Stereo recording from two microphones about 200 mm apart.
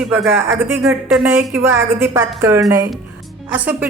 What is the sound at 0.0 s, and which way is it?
Speech, 5° right (ahead or behind).